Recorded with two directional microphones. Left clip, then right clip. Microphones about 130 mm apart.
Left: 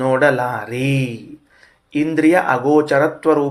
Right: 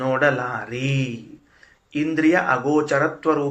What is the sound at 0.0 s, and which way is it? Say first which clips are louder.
Speech: left 5 dB; 40° left (ahead or behind).